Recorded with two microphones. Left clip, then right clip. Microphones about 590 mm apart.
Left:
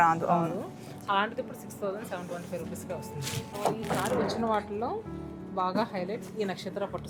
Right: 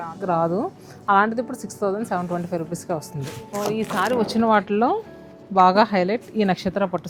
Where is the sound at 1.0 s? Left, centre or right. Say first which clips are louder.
Right 10 dB; right.